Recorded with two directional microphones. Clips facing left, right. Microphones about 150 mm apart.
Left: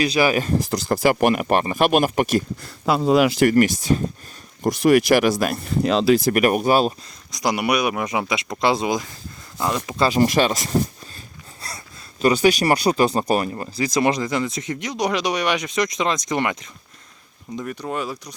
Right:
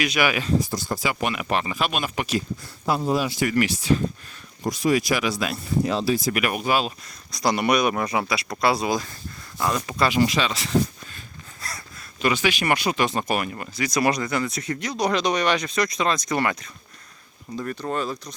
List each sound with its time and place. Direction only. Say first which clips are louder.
0.0 s speech: left 4 dB; 35° left (ahead or behind)
0.7 s speech: left 8 dB; 75° left (ahead or behind)
1.1 s speech: left 7 dB; 50° left (ahead or behind)
2.8 s speech: left 6 dB; 90° left
4.6 s speech: left 6 dB; 65° left (ahead or behind)
5.3 s speech: left 5 dB; 50° left (ahead or behind)
5.6 s speech: left 5 dB; 75° left (ahead or behind)
6.3 s speech: left 6 dB; 45° left (ahead or behind)
7.3 s speech: even; 15° left (ahead or behind)
10.0 s speech: left 4 dB; 40° left (ahead or behind)
12.2 s speech: left 6 dB; 40° left (ahead or behind); by 18.3 s 10° left (ahead or behind)